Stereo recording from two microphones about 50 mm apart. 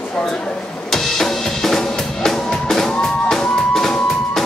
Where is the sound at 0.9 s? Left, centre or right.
Centre.